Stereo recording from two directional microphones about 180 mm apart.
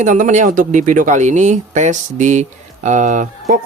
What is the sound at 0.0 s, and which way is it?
Speech, 45° right (ahead or behind).